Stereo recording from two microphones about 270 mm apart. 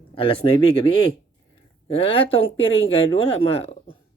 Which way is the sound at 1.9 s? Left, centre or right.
Centre.